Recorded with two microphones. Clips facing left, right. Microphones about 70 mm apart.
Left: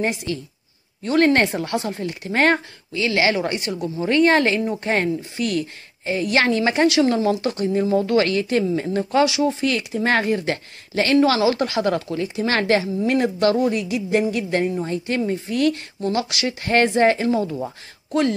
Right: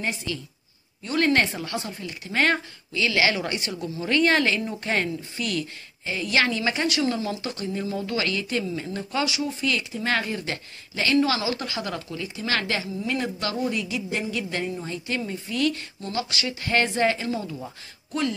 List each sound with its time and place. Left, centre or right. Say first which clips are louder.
1.1 s a woman's voice: left 5 dB; left
1.6 s a woman's voice: left 7 dB; left
9.2 s speech: left 8 dB; left
9.9 s a woman's voice: left 7 dB; left
11.3 s a woman's voice: left 9 dB; left
16.1 s speech: left 6 dB; left
16.4 s a woman's voice: left 6 dB; left